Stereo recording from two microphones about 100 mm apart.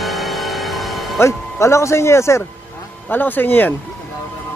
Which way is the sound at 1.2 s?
30° left (ahead or behind).